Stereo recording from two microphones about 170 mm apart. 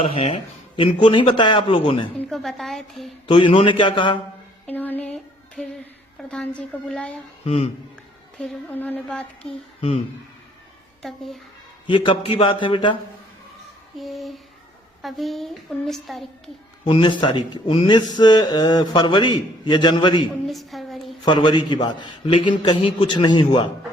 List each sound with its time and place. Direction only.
0.0 s speech: 35° left (ahead or behind)
2.1 s a woman's voice: centre (ahead or behind)
3.2 s speech: 30° left (ahead or behind)
4.6 s music: 10° left (ahead or behind)
6.2 s a sound: 5° left (ahead or behind)
7.4 s speech: 35° left (ahead or behind)
8.4 s a sound: 10° left (ahead or behind)
11.0 s a woman's voice: centre (ahead or behind)
11.9 s speech: 30° left (ahead or behind)
14.0 s a woman's voice: centre (ahead or behind)
16.8 s speech: 30° left (ahead or behind)
20.5 s a woman's voice: centre (ahead or behind)
21.2 s speech: 25° left (ahead or behind)